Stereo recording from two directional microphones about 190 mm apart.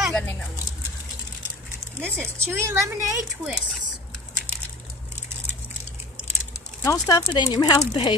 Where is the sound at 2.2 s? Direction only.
15° right (ahead or behind).